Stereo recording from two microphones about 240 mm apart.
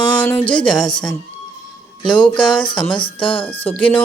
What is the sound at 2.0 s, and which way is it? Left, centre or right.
Speech, centre.